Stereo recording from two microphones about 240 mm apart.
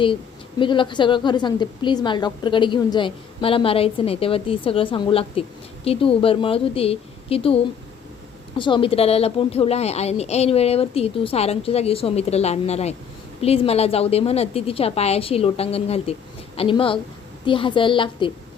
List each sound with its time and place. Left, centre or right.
0.6 s a woman's voice: centre